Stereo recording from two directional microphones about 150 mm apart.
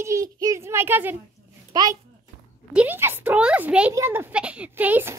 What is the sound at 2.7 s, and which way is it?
A woman's voice, 15° right (ahead or behind).